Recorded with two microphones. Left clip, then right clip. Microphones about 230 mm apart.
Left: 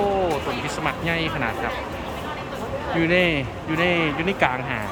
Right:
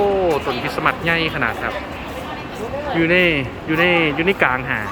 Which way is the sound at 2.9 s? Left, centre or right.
Centre.